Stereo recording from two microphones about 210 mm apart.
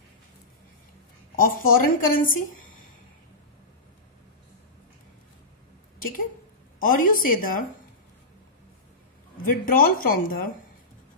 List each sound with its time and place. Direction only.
1.3 s a woman's voice: 40° left (ahead or behind)
6.8 s a woman's voice: 40° left (ahead or behind)
9.4 s a woman's voice: 45° left (ahead or behind)